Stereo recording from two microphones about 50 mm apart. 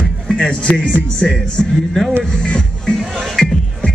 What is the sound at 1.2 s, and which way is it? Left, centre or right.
Speech, centre.